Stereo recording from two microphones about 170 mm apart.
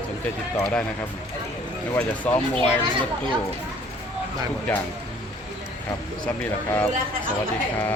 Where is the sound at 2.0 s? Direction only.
10° left (ahead or behind).